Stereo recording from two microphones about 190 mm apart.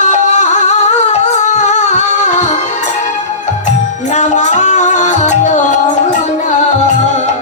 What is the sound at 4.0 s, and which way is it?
Music, 40° left (ahead or behind).